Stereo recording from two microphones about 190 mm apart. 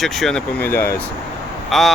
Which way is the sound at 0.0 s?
Centre (ahead or behind).